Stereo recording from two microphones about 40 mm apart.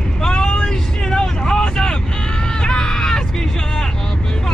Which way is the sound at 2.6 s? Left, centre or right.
Centre.